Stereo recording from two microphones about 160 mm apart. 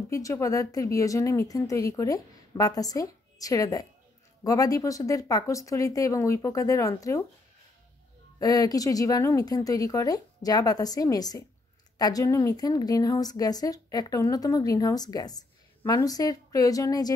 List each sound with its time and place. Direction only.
0.1 s a woman's voice: 20° left (ahead or behind)
8.4 s a woman's voice: 25° left (ahead or behind)